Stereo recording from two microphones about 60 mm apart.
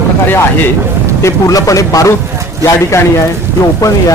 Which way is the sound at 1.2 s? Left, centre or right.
Left.